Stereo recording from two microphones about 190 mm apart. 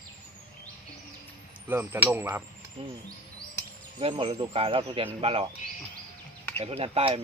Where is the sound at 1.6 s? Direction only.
10° right (ahead or behind).